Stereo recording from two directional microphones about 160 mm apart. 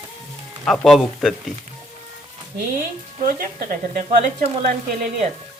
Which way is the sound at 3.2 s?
60° right (ahead or behind).